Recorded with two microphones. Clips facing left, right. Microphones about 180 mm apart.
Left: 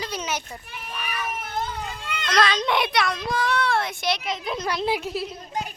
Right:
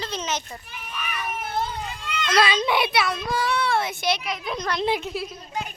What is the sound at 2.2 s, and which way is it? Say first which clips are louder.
A child's voice: right 1 dB; 5° right (ahead or behind).